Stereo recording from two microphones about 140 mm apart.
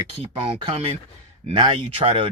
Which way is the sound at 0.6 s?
45° right (ahead or behind).